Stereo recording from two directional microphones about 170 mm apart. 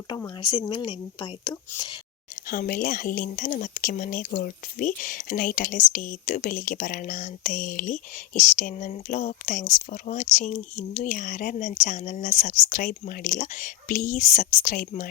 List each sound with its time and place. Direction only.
0.3 s speech: 25° left (ahead or behind)
2.3 s speech: 55° left (ahead or behind)